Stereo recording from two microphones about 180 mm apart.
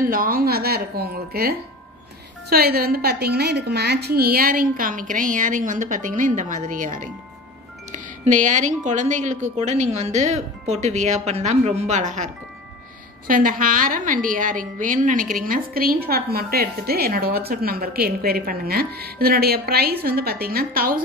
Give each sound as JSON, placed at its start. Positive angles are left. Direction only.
{"t": 0.0, "sound": "a woman's voice", "side_deg": -50}
{"t": 2.5, "sound": "a woman's voice", "side_deg": -55}
{"t": 13.3, "sound": "a woman's voice", "side_deg": -50}